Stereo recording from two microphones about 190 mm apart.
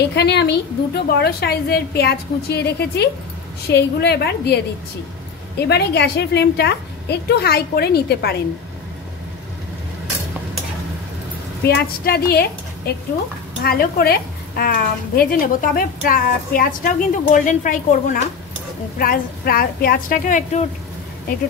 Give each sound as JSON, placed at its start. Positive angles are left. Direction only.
{"t": 0.1, "sound": "a woman's voice", "side_deg": 60}
{"t": 5.6, "sound": "a woman's voice", "side_deg": 60}
{"t": 11.6, "sound": "a woman's voice", "side_deg": 55}